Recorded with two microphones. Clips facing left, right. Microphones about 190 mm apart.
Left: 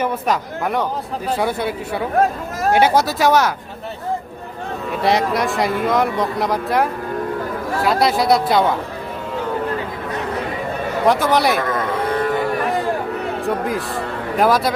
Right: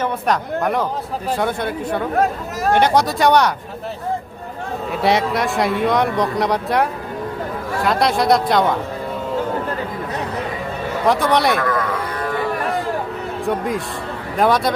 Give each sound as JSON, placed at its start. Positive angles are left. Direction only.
{"t": 0.0, "sound": "speech", "side_deg": 0}
{"t": 5.0, "sound": "speech", "side_deg": 0}
{"t": 7.9, "sound": "speech", "side_deg": 5}
{"t": 11.0, "sound": "speech", "side_deg": 0}
{"t": 13.5, "sound": "speech", "side_deg": 0}